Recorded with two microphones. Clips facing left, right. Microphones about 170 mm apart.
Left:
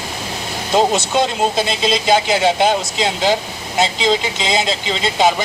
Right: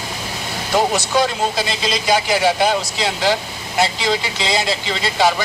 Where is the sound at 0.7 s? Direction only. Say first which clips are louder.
Left 2 dB; 25° left (ahead or behind).